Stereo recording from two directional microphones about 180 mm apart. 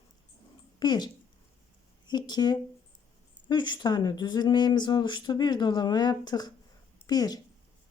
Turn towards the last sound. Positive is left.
turn(degrees=20)  # may be behind; listen again after turning